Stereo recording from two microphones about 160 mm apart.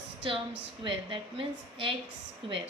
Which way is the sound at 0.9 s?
30° right (ahead or behind).